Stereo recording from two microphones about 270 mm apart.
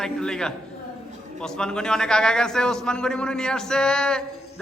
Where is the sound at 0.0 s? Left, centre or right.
Centre.